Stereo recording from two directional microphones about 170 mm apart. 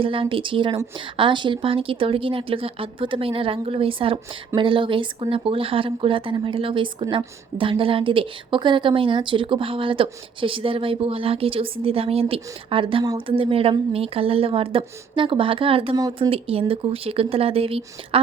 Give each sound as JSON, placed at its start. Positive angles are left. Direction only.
{"t": 0.0, "sound": "a woman's voice", "side_deg": -30}
{"t": 16.0, "sound": "speech", "side_deg": -20}
{"t": 16.3, "sound": "a woman's voice", "side_deg": -35}